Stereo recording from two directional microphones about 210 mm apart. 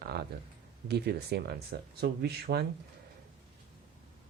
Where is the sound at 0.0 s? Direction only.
50° right (ahead or behind).